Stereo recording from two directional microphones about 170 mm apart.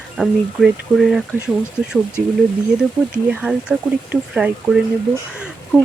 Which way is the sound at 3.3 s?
5° right (ahead or behind).